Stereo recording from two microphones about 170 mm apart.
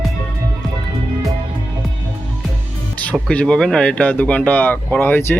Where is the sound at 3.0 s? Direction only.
10° left (ahead or behind).